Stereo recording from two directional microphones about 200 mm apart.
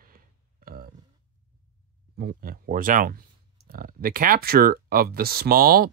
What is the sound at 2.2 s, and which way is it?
Speech, 50° right (ahead or behind).